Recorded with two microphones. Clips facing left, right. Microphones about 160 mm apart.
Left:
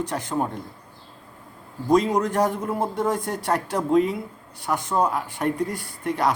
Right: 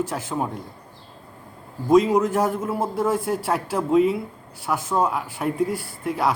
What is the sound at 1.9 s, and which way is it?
A man's voice, 5° right (ahead or behind).